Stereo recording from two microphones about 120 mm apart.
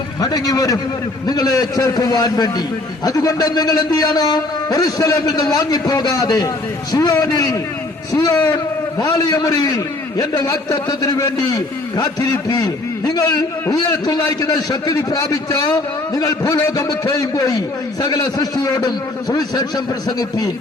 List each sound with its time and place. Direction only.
0.2 s a man's voice: 35° left (ahead or behind)